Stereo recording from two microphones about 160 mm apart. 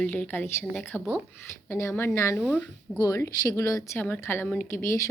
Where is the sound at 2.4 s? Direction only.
5° left (ahead or behind).